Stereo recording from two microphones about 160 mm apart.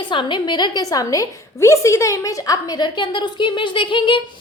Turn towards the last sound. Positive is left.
turn(degrees=30)  # may be behind; listen again after turning